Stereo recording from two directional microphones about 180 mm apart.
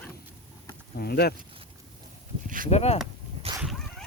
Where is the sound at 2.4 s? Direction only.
50° right (ahead or behind).